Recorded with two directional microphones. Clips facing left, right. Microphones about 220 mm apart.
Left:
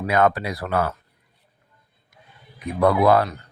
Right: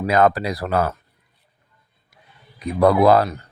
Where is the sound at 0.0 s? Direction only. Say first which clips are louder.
Right 3 dB; 35° right (ahead or behind).